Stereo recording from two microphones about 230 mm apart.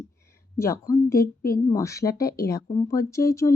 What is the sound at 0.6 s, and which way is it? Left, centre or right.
Speech, centre.